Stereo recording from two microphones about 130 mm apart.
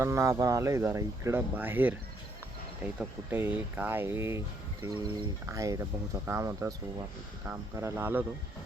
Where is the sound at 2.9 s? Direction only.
15° right (ahead or behind).